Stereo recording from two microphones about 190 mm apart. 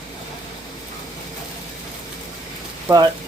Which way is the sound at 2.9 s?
20° right (ahead or behind).